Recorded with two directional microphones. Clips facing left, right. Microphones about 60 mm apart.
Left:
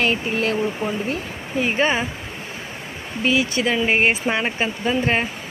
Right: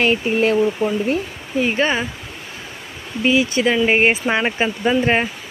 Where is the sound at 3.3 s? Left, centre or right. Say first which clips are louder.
Right 3 dB; centre.